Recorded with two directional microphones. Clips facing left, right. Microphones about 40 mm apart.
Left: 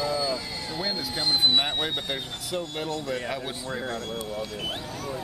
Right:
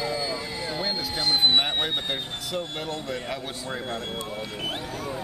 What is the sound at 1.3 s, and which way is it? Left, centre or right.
Speech, centre.